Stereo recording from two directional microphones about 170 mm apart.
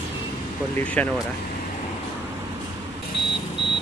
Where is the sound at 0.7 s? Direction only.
10° left (ahead or behind).